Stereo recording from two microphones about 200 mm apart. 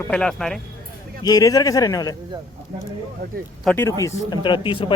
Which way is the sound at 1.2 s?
20° left (ahead or behind).